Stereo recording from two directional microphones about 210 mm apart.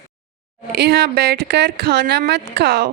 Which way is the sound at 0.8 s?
50° right (ahead or behind).